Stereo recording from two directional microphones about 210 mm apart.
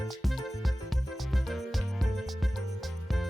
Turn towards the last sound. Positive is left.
turn(degrees=0)  # may be behind; listen again after turning